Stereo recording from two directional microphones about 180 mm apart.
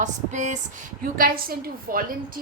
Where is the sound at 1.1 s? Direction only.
55° right (ahead or behind).